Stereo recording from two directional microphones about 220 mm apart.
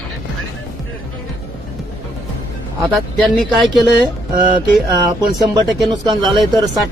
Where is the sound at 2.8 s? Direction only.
Centre (ahead or behind).